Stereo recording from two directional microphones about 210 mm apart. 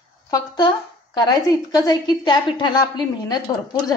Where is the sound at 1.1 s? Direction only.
20° left (ahead or behind).